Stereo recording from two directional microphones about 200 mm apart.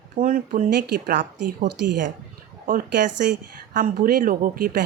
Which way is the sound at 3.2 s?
45° right (ahead or behind).